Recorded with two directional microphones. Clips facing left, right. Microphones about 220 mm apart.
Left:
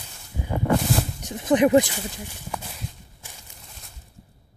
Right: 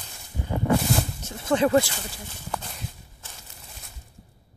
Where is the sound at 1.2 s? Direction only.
15° left (ahead or behind).